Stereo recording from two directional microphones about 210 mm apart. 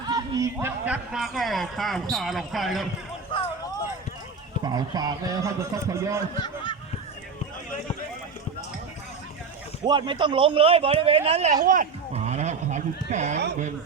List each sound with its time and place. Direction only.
0.0 s speech: 15° right (ahead or behind); by 2.8 s centre (ahead or behind)
4.6 s a man's voice: 20° right (ahead or behind)
6.3 s honk: 20° left (ahead or behind)
9.8 s a man's voice: 20° right (ahead or behind)
11.6 s a sound: 40° right (ahead or behind)